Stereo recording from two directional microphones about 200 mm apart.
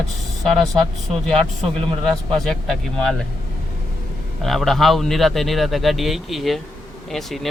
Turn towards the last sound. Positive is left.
turn(degrees=0)  # may be behind; listen again after turning